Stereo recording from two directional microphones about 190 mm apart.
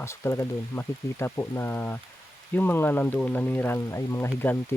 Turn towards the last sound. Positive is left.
turn(degrees=10)  # may be behind; listen again after turning